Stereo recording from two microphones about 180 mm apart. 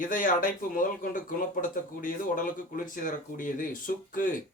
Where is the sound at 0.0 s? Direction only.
45° left (ahead or behind).